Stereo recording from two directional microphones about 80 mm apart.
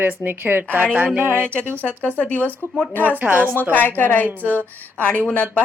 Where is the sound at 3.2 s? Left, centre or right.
Right.